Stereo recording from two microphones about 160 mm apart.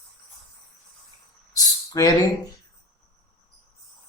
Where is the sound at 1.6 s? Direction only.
25° left (ahead or behind).